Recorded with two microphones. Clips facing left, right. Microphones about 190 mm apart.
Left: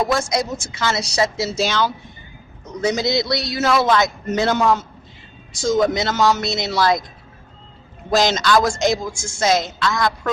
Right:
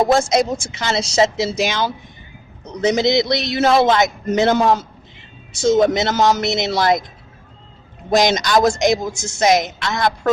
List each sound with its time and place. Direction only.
0.1 s a man's voice: 25° right (ahead or behind)
8.1 s a man's voice: 20° right (ahead or behind)